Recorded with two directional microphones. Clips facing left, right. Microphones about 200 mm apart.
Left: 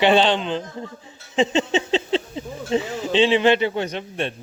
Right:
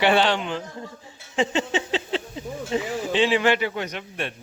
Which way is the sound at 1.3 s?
20° left (ahead or behind).